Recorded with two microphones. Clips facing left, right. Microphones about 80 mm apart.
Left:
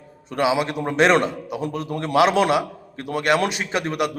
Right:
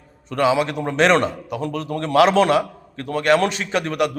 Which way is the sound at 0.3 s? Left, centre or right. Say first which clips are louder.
Right 2 dB; centre.